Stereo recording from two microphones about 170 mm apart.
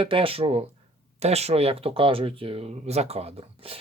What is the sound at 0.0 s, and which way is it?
Speech, 30° right (ahead or behind).